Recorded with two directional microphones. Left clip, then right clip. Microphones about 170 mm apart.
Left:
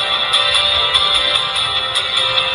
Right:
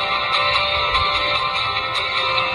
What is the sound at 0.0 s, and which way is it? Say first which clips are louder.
Music: left 4 dB; 10° left (ahead or behind).